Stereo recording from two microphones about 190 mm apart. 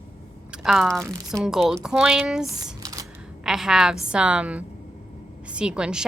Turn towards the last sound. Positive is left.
turn(degrees=-5)  # may be behind; listen again after turning